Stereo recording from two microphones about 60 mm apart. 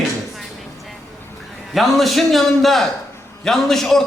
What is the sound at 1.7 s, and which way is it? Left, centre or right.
A man's voice, centre.